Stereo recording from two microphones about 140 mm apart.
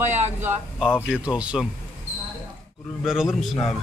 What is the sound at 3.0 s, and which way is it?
Speech, 5° right (ahead or behind).